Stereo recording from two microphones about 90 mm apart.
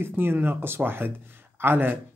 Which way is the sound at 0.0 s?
25° right (ahead or behind).